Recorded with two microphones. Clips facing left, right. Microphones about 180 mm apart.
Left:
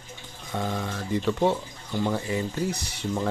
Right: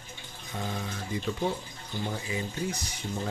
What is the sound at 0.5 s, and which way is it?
Speech, 70° left (ahead or behind).